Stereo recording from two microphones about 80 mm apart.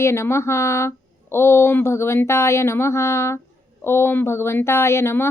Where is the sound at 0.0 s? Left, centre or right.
Left.